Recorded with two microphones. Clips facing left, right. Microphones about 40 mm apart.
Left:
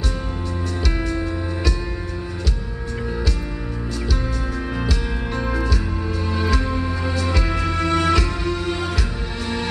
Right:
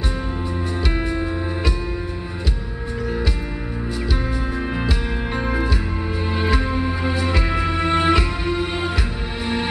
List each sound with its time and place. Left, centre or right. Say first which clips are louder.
0.9 s music: right 1 dB; right
4.7 s music: right 1 dB; right